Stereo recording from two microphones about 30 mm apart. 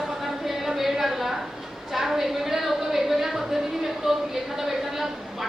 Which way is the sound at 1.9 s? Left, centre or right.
Centre.